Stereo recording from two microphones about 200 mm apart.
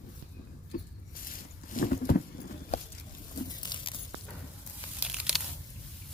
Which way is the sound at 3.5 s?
20° left (ahead or behind).